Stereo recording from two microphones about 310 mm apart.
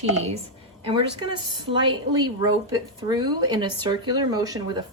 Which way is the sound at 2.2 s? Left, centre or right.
Centre.